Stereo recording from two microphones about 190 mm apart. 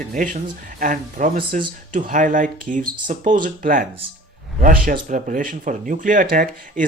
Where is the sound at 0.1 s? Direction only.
45° right (ahead or behind).